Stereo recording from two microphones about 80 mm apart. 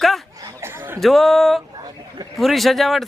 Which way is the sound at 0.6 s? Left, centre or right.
Right.